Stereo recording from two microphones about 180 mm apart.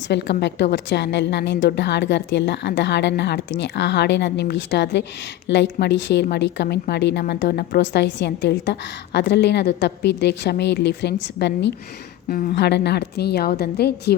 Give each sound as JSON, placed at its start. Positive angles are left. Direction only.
{"t": 0.1, "sound": "a woman's voice", "side_deg": 70}
{"t": 12.3, "sound": "a woman's voice", "side_deg": 55}